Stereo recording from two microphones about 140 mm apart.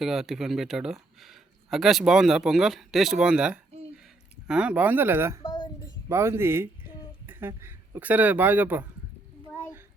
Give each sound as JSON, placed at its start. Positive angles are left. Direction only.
{"t": 0.0, "sound": "speech", "side_deg": 0}
{"t": 5.4, "sound": "a sound", "side_deg": 35}
{"t": 6.1, "sound": "speech", "side_deg": -20}